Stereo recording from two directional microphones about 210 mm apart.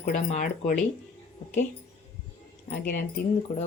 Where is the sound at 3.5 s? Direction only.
40° left (ahead or behind).